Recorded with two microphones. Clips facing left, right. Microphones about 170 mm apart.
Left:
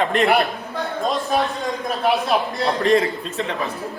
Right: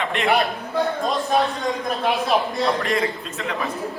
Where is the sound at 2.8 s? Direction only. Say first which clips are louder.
Left 6 dB; 35° left (ahead or behind).